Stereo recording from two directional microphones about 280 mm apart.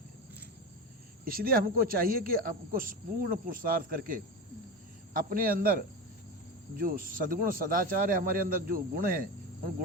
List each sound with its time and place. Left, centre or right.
1.2 s speech: right